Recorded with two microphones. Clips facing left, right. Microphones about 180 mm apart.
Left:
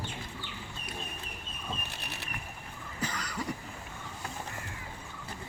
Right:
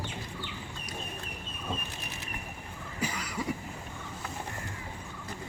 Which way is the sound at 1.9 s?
70° left (ahead or behind).